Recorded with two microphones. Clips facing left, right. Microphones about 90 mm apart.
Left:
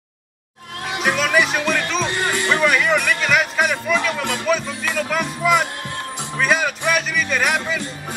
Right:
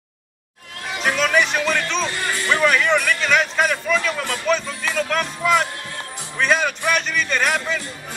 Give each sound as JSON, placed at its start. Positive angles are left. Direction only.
{"t": 0.8, "sound": "speech", "side_deg": 15}
{"t": 1.6, "sound": "music", "side_deg": 10}
{"t": 2.0, "sound": "music", "side_deg": 20}
{"t": 3.9, "sound": "speech", "side_deg": 15}
{"t": 6.3, "sound": "music", "side_deg": 5}